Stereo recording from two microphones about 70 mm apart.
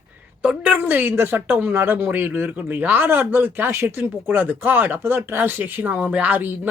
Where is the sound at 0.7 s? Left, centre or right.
Right.